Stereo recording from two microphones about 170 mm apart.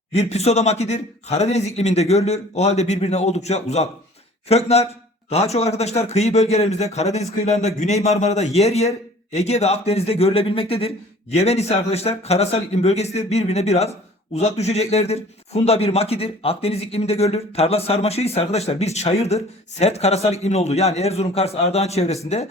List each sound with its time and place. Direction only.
0.1 s speech: 40° left (ahead or behind)